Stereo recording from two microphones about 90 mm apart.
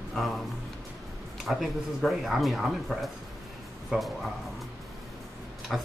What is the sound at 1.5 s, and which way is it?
Speech, centre (ahead or behind).